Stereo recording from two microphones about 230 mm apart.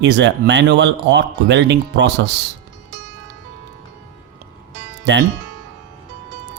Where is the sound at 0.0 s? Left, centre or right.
Right.